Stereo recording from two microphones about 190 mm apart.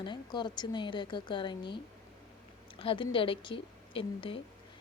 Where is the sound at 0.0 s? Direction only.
25° left (ahead or behind).